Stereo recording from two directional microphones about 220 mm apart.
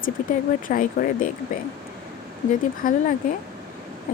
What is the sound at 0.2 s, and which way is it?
Speech, 35° left (ahead or behind).